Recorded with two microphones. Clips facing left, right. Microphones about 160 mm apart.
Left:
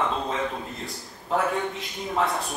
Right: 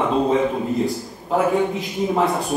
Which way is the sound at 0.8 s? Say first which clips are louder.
Right 14 dB; 5° right (ahead or behind).